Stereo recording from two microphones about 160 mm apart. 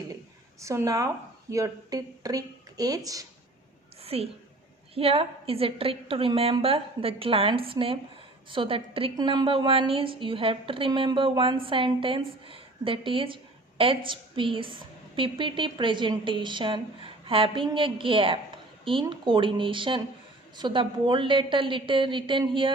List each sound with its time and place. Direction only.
0.6 s a woman's voice: 20° right (ahead or behind)
4.0 s a woman's voice: 40° right (ahead or behind)